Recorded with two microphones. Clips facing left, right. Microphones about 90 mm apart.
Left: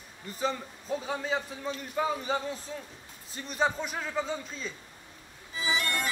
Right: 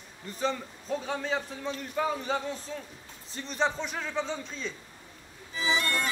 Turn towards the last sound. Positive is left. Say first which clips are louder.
# right 2 dB
turn(degrees=-35)  # may be behind; listen again after turning